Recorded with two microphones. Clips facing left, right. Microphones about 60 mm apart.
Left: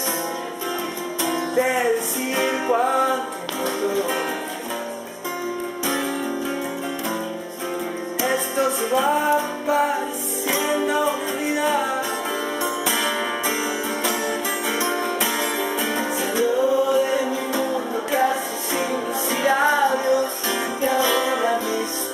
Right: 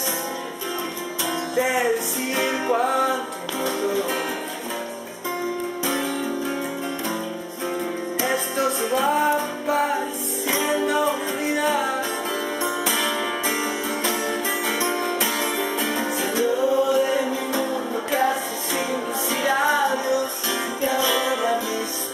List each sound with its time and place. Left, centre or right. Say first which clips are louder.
1.2 s music: left 2 dB; centre
8.2 s music: left 2 dB; centre